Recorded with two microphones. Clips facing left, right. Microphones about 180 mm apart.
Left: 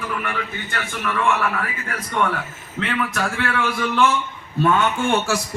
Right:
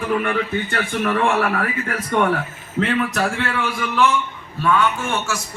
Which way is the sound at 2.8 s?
40° right (ahead or behind).